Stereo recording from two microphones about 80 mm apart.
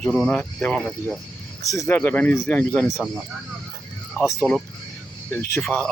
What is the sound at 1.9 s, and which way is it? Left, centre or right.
Speech, left.